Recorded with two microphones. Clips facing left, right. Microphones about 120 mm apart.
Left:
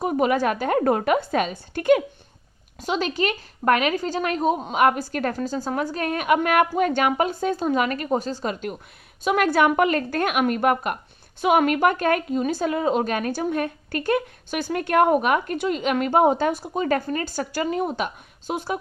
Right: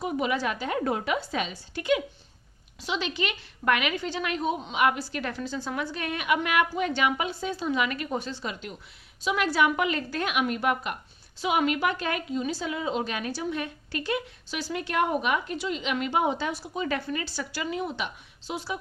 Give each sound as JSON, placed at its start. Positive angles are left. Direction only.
{"t": 0.0, "sound": "a woman's voice", "side_deg": 50}